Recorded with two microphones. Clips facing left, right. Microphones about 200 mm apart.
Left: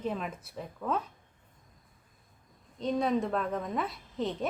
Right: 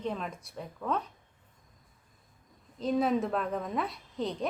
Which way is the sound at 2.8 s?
Centre (ahead or behind).